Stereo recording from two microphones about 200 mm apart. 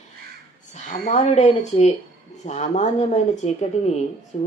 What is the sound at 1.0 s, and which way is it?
Speech, 35° left (ahead or behind).